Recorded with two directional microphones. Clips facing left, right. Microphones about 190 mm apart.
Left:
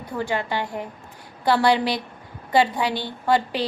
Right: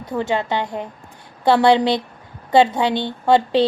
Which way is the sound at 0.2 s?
25° right (ahead or behind).